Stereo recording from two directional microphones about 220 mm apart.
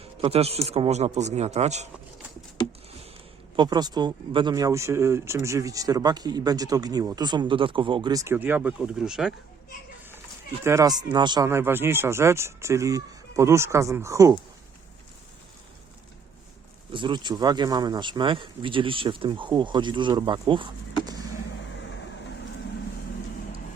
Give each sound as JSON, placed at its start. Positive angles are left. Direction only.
{"t": 0.2, "sound": "speech", "side_deg": -25}
{"t": 2.6, "sound": "a sound", "side_deg": 20}
{"t": 3.5, "sound": "speech", "side_deg": -20}
{"t": 10.6, "sound": "speech", "side_deg": -15}
{"t": 16.9, "sound": "speech", "side_deg": -20}